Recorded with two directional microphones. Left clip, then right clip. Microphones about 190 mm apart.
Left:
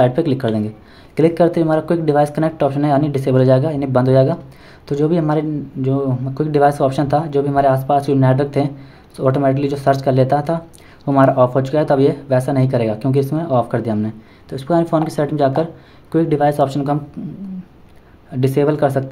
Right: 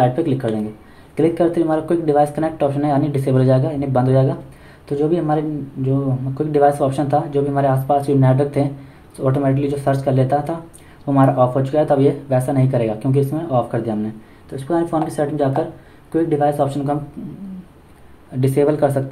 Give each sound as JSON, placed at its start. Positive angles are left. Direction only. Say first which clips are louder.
{"t": 0.0, "sound": "speech", "louder": "left 2 dB", "side_deg": 35}
{"t": 18.4, "sound": "speech", "louder": "even", "side_deg": 25}